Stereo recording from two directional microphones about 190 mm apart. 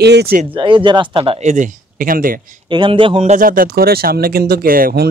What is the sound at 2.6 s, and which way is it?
Speech, 25° right (ahead or behind).